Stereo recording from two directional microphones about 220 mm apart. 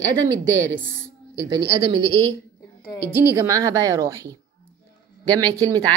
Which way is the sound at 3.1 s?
10° right (ahead or behind).